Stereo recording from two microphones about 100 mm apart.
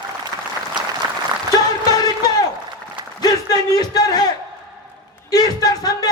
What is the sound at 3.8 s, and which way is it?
Speech, 40° left (ahead or behind).